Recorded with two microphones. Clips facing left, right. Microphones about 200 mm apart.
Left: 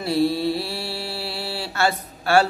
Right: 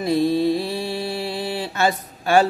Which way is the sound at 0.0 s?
15° right (ahead or behind).